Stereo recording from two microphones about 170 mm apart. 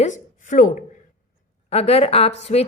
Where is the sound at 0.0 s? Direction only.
50° left (ahead or behind).